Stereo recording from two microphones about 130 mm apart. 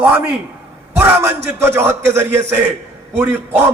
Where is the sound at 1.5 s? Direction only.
20° right (ahead or behind).